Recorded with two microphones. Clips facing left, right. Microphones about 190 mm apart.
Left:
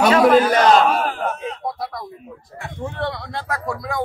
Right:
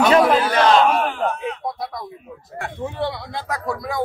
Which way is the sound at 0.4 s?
40° left (ahead or behind).